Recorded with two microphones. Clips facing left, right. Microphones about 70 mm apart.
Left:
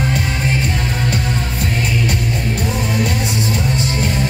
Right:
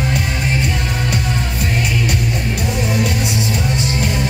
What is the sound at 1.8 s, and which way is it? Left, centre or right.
Music, left.